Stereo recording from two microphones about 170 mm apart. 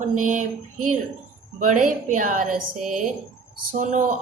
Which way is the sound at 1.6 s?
50° right (ahead or behind).